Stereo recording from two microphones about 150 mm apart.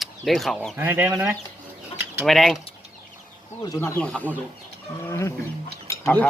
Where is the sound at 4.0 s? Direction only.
5° left (ahead or behind).